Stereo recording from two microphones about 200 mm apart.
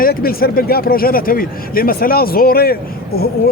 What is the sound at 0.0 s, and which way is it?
Speech, 50° left (ahead or behind).